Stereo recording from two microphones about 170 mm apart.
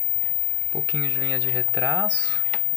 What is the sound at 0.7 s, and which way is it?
Speech, 20° right (ahead or behind).